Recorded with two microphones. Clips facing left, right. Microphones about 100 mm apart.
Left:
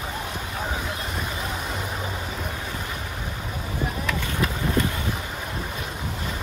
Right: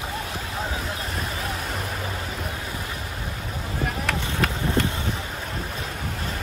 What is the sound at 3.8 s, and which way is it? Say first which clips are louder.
Run: right 1 dB; 65° right (ahead or behind).